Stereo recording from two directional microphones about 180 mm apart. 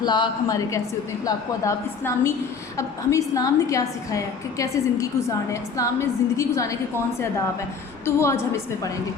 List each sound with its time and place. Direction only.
0.0 s a woman's voice: 25° left (ahead or behind)
8.0 s a woman's voice: 15° left (ahead or behind)